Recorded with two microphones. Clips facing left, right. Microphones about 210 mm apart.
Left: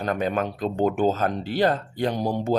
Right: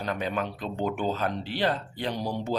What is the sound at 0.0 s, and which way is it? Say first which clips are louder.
Speech: left 5 dB; 50° left (ahead or behind).